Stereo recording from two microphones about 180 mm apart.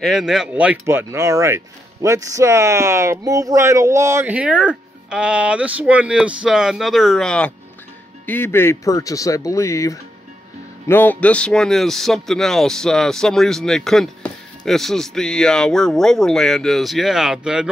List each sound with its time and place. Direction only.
0.0 s speech: centre (ahead or behind)